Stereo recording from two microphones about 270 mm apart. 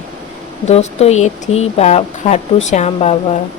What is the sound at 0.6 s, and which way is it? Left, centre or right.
Speech, left.